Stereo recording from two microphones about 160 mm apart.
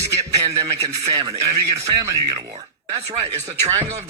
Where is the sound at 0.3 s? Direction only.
20° right (ahead or behind).